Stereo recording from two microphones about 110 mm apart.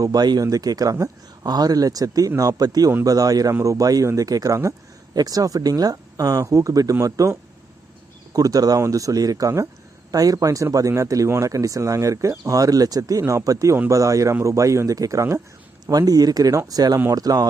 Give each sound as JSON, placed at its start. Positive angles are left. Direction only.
{"t": 0.0, "sound": "speech", "side_deg": -35}